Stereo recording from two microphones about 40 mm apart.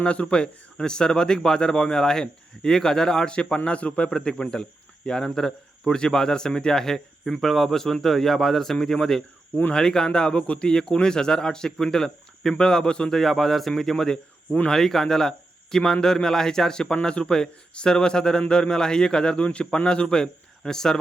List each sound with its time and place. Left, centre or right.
0.0 s speech: left
4.1 s speech: centre
10.7 s speech: centre
13.1 s speech: centre